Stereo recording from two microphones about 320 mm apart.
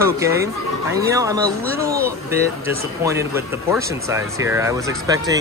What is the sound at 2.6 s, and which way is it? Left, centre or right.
Speech, centre.